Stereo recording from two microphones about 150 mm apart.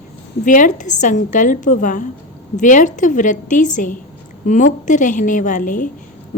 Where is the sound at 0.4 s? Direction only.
60° left (ahead or behind).